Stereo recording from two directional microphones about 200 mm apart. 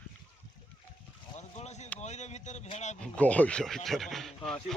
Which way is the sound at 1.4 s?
35° left (ahead or behind).